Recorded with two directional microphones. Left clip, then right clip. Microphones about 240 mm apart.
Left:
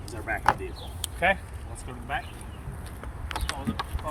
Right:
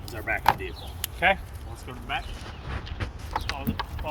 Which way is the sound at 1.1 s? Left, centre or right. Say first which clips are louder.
Right 2 dB; centre.